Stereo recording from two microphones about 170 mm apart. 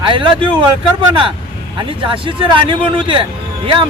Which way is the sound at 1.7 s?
30° right (ahead or behind).